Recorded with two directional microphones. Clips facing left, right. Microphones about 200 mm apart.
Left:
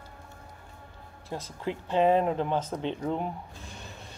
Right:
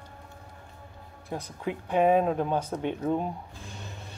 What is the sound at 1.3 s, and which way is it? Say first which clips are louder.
Speech: right 1 dB; 15° right (ahead or behind).